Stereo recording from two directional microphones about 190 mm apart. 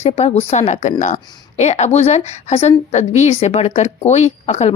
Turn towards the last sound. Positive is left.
turn(degrees=35)  # may be behind; listen again after turning